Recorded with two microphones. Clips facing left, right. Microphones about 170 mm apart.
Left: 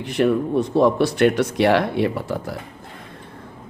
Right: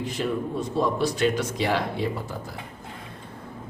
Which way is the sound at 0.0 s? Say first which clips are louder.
Left 8 dB; 65° left (ahead or behind).